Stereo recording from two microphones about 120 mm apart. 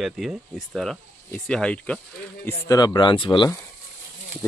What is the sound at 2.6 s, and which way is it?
Speech, 30° left (ahead or behind).